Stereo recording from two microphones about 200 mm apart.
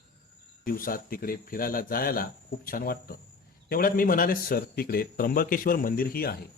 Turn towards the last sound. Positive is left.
turn(degrees=50)  # may be behind; listen again after turning